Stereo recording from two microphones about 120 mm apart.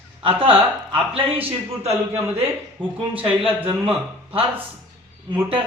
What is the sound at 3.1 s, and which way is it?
A man's voice, 50° right (ahead or behind).